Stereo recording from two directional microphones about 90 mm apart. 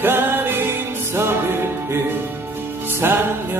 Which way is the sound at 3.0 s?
25° right (ahead or behind).